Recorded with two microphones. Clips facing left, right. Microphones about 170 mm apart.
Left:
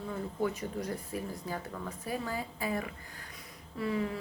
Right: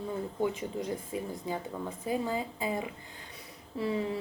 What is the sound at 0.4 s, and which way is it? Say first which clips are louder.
Speech: right 1 dB; 20° right (ahead or behind).